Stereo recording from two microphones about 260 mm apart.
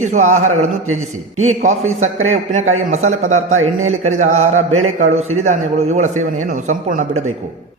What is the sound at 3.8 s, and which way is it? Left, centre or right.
A man's voice, right.